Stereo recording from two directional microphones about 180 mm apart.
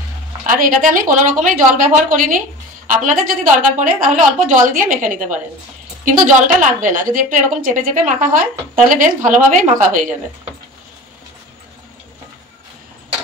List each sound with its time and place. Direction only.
0.5 s a woman's voice: 50° right (ahead or behind)